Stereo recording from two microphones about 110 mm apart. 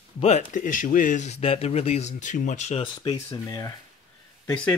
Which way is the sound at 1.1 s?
80° left.